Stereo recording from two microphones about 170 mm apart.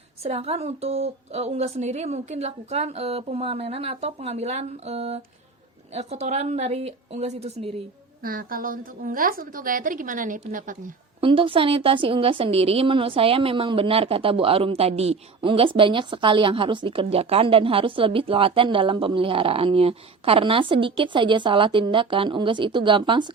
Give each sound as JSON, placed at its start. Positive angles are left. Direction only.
{"t": 0.2, "sound": "a woman's voice", "side_deg": -35}
{"t": 8.2, "sound": "a woman's voice", "side_deg": -55}
{"t": 11.2, "sound": "a woman's voice", "side_deg": -30}